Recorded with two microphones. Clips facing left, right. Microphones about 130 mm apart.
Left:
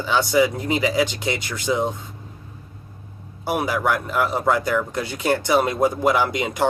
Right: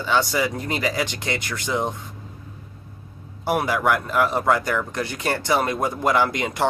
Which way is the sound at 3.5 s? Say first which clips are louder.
Right 1 dB; 5° left (ahead or behind).